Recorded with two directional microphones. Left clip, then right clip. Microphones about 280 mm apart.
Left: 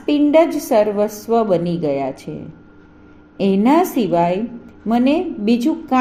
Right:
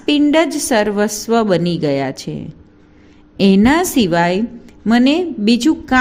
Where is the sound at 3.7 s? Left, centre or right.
Right.